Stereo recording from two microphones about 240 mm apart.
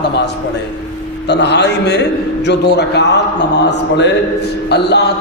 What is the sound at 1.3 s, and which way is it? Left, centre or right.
A man's voice, left.